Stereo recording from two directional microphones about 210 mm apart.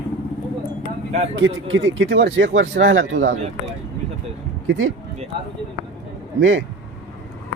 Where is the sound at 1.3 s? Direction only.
65° right (ahead or behind).